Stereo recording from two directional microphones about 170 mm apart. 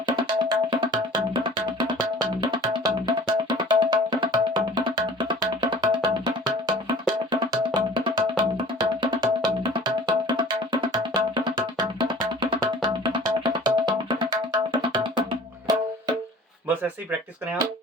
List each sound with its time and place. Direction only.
0.2 s music: 30° right (ahead or behind)